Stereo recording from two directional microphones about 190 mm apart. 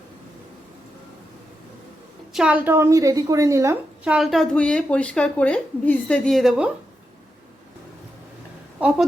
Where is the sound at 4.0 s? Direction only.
5° right (ahead or behind).